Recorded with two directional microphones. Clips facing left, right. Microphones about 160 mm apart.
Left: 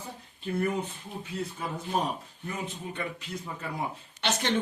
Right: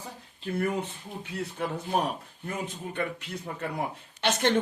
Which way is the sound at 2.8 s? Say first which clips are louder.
Right 3 dB; 45° right (ahead or behind).